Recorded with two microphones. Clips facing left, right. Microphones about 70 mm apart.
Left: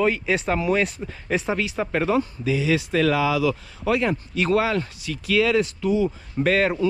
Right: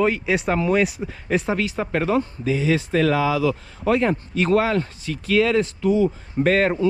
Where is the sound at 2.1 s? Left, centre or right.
Right.